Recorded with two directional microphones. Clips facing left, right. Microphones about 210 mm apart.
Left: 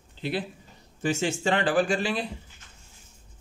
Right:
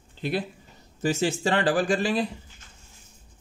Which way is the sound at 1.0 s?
35° right (ahead or behind).